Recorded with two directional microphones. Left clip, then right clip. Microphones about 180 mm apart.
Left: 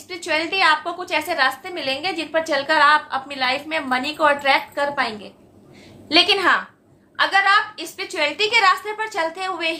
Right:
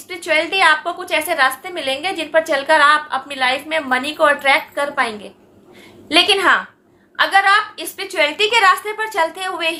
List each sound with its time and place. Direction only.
0.1 s a woman's voice: 20° right (ahead or behind)